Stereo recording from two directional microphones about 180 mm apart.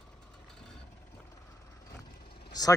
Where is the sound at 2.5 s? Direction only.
20° left (ahead or behind).